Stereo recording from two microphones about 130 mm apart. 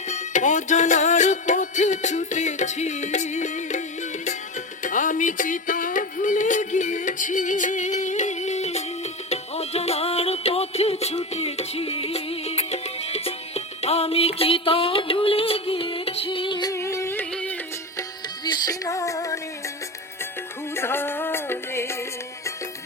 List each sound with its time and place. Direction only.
0.1 s music: 65° left (ahead or behind)
4.8 s music: 80° left; by 16.7 s 35° left (ahead or behind)
16.7 s music: 20° left (ahead or behind)
18.4 s music: 30° left (ahead or behind)
20.7 s music: 15° left (ahead or behind)